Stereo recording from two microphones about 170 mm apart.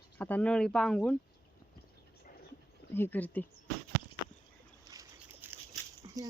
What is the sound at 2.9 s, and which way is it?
Speech, 10° left (ahead or behind).